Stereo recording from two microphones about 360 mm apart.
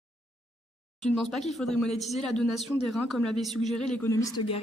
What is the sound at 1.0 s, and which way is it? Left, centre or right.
Speech, centre.